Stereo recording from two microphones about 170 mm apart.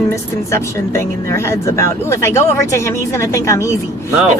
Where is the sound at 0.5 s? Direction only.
15° left (ahead or behind).